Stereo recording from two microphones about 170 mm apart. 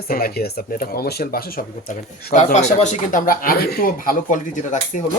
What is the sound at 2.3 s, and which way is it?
Speech, 40° left (ahead or behind).